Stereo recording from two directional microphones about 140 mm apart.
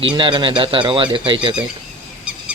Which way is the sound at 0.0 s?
35° right (ahead or behind).